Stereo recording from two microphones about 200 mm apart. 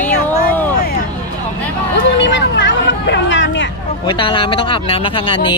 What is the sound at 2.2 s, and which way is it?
Hubbub, 65° left (ahead or behind).